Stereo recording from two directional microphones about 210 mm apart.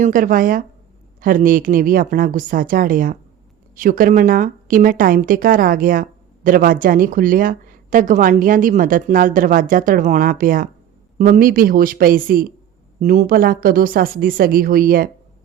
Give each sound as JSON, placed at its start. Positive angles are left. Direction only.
{"t": 0.0, "sound": "a woman's voice", "side_deg": -40}